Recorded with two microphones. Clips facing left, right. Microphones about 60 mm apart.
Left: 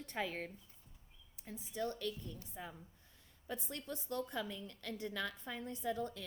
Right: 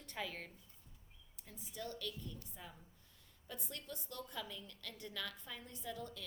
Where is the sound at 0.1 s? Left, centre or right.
Left.